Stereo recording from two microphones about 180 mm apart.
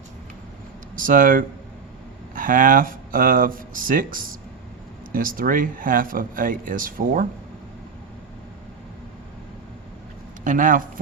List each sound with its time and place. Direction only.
0.9 s speech: 50° right (ahead or behind)
10.4 s speech: 45° right (ahead or behind)